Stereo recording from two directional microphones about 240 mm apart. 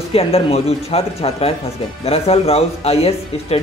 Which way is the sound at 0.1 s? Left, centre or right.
Left.